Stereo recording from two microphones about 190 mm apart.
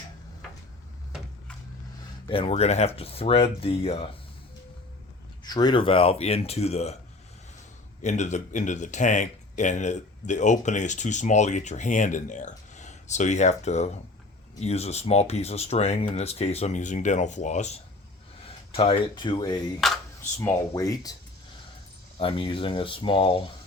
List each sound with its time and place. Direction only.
2.2 s speech: 25° left (ahead or behind)
5.4 s speech: 20° left (ahead or behind)
8.0 s speech: 40° left (ahead or behind)
19.8 s speech: centre (ahead or behind)
20.4 s speech: 15° left (ahead or behind)
22.2 s speech: 25° left (ahead or behind)